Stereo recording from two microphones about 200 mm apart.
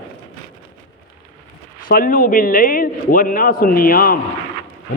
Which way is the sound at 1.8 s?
45° left (ahead or behind).